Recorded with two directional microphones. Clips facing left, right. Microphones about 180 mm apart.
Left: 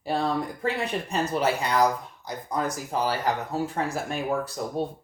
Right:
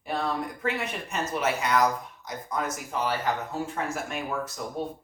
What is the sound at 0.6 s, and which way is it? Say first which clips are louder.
Speech: left 3 dB; 35° left (ahead or behind).